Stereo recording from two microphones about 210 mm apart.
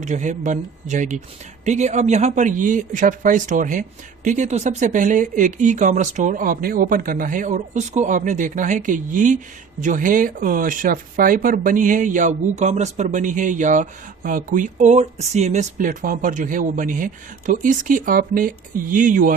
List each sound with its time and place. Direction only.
0.0 s speech: 35° right (ahead or behind)